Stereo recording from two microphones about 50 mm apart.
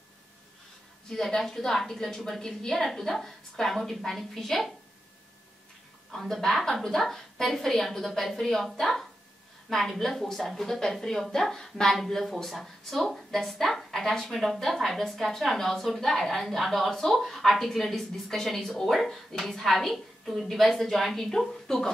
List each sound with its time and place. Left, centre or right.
1.1 s a woman's voice: centre
6.1 s speech: centre